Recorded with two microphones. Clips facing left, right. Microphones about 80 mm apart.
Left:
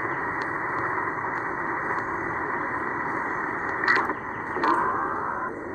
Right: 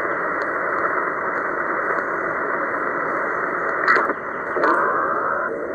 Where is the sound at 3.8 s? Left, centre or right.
Right.